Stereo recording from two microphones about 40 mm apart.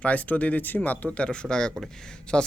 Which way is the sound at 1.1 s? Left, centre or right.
Left.